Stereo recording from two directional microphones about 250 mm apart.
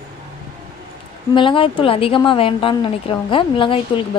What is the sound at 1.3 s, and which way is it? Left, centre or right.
A woman's voice, centre.